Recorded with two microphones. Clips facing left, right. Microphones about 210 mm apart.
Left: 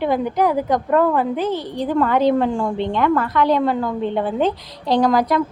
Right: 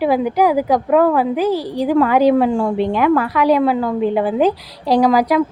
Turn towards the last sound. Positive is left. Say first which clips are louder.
# right 3 dB
turn(degrees=-10)  # may be behind; listen again after turning